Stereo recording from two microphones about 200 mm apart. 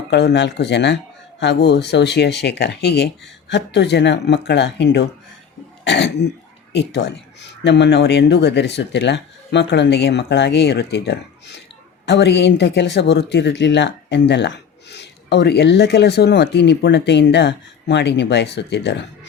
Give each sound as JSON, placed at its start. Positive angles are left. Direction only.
{"t": 0.1, "sound": "speech", "side_deg": 60}